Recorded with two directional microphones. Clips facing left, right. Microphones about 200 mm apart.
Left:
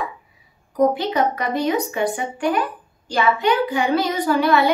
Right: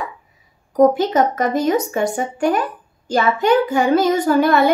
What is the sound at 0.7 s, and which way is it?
A child's voice, 45° right (ahead or behind).